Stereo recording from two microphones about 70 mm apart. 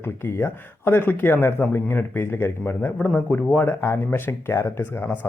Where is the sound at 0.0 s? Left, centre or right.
Left.